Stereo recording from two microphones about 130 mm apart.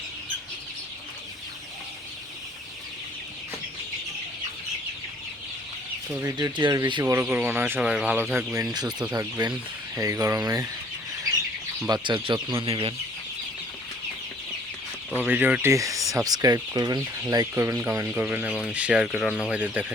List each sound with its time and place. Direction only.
6.1 s speech: 20° right (ahead or behind)
6.3 s speech: 35° right (ahead or behind)
7.0 s speech: 20° right (ahead or behind)
8.5 s speech: 30° right (ahead or behind)
12.0 s speech: 35° right (ahead or behind)
15.2 s speech: 15° right (ahead or behind)
15.7 s speech: 25° right (ahead or behind); by 19.9 s 10° right (ahead or behind)